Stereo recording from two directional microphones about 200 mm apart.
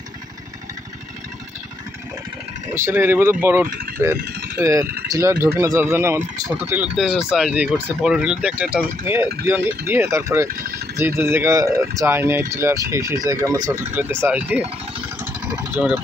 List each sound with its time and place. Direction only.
2.7 s speech: 10° right (ahead or behind)
10.5 s speech: 45° right (ahead or behind)
11.0 s speech: 10° right (ahead or behind)
15.7 s speech: 5° right (ahead or behind)